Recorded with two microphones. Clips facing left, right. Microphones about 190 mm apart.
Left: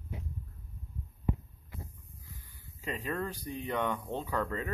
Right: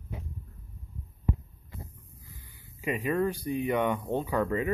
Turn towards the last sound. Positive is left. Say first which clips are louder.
# right 6 dB
turn(degrees=-10)  # may be behind; listen again after turning